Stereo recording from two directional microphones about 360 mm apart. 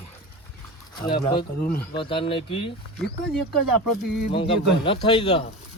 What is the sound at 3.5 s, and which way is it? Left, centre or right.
Speech, right.